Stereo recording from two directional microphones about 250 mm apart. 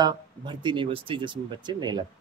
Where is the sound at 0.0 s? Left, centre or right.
Centre.